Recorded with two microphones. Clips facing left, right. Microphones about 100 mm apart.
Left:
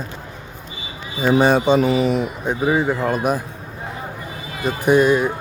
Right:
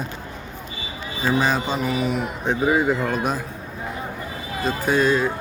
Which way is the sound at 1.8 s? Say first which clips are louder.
Left 6 dB; 40° left (ahead or behind).